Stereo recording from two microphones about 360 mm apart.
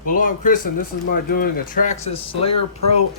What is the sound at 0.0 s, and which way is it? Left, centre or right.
Speech, left.